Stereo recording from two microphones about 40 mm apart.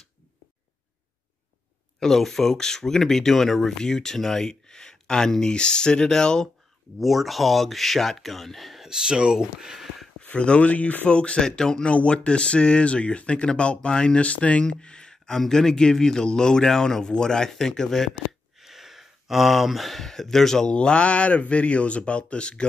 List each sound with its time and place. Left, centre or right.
2.0 s speech: centre
7.0 s speech: centre
8.8 s speech: centre
9.6 s a sound: centre
10.3 s speech: left
11.1 s speech: left
11.9 s speech: left
14.6 s speech: left; by 18.1 s centre
18.6 s speech: centre
20.6 s speech: left